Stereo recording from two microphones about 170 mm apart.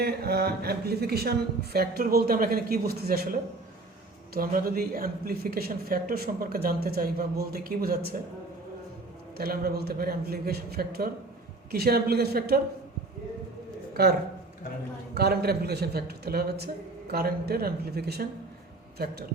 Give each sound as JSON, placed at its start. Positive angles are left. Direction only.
{"t": 0.0, "sound": "a man's voice", "side_deg": -65}
{"t": 4.4, "sound": "a man's voice", "side_deg": -60}
{"t": 9.4, "sound": "a man's voice", "side_deg": -65}
{"t": 13.9, "sound": "a man's voice", "side_deg": -70}